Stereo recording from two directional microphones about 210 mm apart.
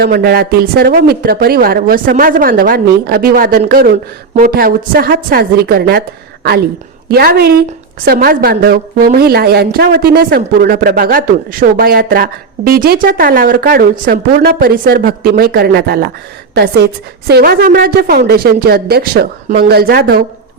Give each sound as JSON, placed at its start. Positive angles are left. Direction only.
{"t": 0.0, "sound": "a woman's voice", "side_deg": -45}